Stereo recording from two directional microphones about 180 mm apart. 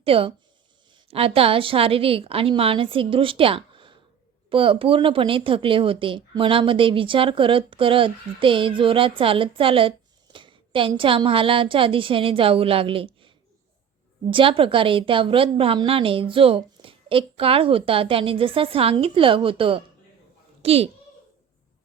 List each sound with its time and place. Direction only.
0.0 s a woman's voice: 30° right (ahead or behind)
14.3 s a child's voice: 30° right (ahead or behind)